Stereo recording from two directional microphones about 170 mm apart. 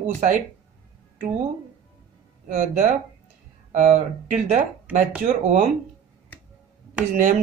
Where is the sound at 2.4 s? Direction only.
45° right (ahead or behind).